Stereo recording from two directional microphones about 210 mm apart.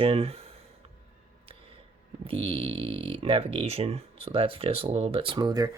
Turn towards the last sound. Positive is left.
turn(degrees=-15)  # may be behind; listen again after turning